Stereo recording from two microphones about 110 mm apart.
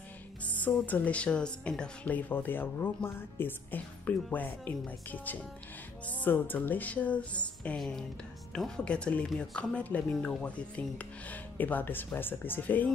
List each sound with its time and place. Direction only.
0.6 s speech: 15° left (ahead or behind)